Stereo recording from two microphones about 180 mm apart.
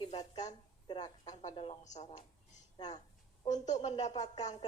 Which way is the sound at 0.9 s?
25° left (ahead or behind).